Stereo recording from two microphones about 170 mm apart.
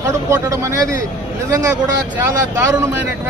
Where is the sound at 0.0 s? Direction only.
15° right (ahead or behind).